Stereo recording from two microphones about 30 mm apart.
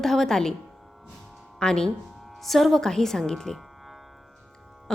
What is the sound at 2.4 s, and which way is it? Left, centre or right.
Speech, centre.